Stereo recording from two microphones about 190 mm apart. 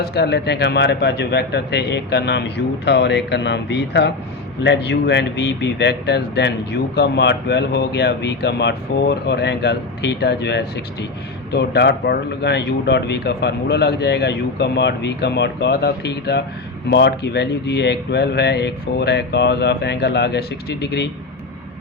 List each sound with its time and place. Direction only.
0.0 s speech: 60° left (ahead or behind)